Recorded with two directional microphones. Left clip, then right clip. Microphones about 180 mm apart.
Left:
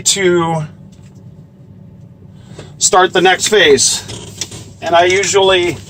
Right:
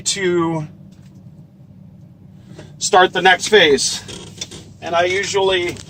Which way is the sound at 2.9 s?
25° left (ahead or behind).